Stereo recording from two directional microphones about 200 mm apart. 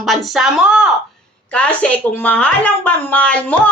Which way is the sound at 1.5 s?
5° left (ahead or behind).